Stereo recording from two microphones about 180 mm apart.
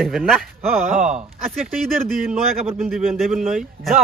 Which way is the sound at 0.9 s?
45° right (ahead or behind).